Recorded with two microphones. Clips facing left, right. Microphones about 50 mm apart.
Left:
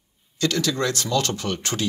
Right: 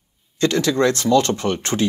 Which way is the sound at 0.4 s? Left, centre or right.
Right.